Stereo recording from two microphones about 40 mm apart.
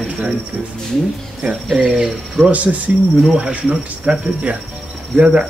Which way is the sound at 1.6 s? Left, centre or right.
Centre.